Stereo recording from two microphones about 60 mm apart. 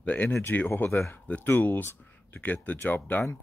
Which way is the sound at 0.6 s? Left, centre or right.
Left.